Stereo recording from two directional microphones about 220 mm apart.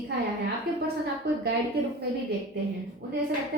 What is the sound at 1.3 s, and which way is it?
Speech, 45° right (ahead or behind).